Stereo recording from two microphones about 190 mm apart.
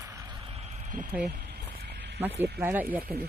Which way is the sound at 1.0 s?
10° right (ahead or behind).